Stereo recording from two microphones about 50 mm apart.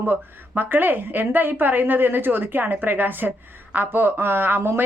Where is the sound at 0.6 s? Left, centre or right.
Right.